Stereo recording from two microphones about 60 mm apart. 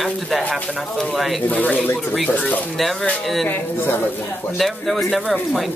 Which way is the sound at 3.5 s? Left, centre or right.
Left.